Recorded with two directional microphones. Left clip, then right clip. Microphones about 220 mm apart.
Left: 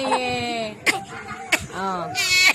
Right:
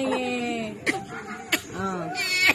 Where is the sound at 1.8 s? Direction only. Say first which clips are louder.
Left 4 dB; 40° left (ahead or behind).